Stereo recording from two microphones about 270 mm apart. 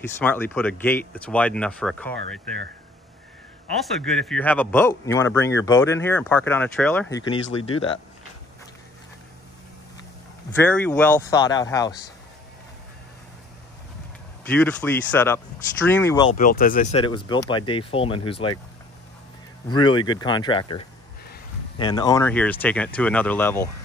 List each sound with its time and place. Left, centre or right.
0.2 s speech: centre
4.0 s speech: centre
7.7 s speech: centre
10.5 s speech: centre
14.4 s speech: centre
16.3 s speech: left
19.7 s speech: centre